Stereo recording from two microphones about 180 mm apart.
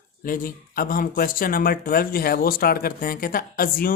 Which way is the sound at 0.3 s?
50° left (ahead or behind).